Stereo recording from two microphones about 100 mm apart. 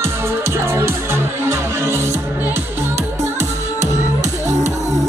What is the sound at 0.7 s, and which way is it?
Music, 25° right (ahead or behind).